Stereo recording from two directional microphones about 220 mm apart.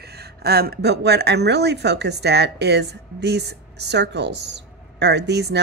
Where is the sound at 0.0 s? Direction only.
45° right (ahead or behind).